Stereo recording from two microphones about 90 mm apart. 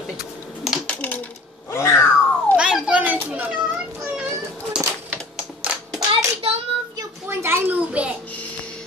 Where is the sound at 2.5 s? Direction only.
10° right (ahead or behind).